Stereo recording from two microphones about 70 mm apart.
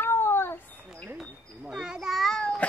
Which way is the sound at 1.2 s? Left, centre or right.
Centre.